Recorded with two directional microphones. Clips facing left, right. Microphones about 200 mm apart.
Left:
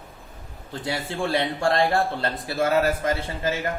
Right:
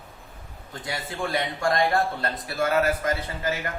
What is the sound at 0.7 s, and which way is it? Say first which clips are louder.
A man's voice: left 4 dB; 30° left (ahead or behind).